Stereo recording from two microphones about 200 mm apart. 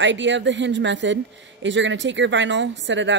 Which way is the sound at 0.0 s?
65° right (ahead or behind).